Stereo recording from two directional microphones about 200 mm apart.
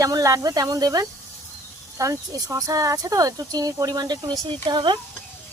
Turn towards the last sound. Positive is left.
turn(degrees=-25)  # may be behind; listen again after turning